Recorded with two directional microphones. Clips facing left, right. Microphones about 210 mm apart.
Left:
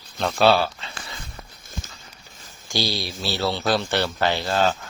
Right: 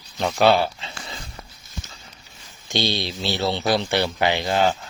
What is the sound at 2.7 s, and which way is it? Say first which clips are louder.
Speech: right 2 dB; 20° right (ahead or behind).